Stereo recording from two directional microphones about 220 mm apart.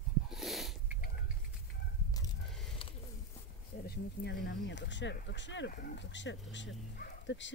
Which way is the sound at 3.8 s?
45° left (ahead or behind).